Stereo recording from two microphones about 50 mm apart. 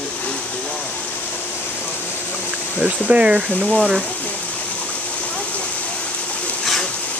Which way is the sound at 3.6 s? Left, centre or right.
Centre.